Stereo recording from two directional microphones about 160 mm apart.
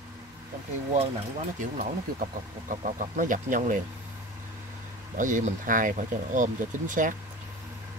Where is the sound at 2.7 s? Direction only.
55° right (ahead or behind).